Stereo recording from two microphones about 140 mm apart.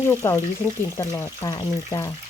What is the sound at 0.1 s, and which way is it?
Speech, 20° left (ahead or behind).